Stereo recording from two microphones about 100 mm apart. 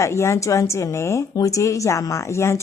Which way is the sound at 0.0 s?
30° left (ahead or behind).